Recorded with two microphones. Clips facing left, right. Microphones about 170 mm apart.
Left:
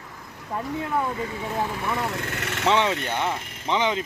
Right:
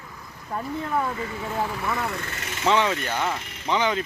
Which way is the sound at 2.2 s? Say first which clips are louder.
Left 4 dB; 65° left (ahead or behind).